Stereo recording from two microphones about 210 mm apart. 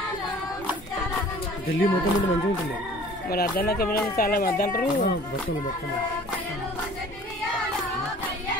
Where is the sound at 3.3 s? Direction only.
45° left (ahead or behind).